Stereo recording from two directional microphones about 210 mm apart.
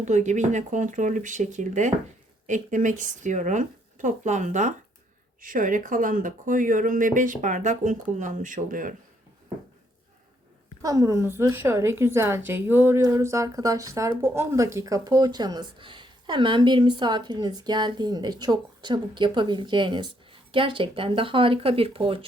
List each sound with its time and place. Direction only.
0.0 s speech: 35° right (ahead or behind)
10.8 s a woman's voice: 15° right (ahead or behind)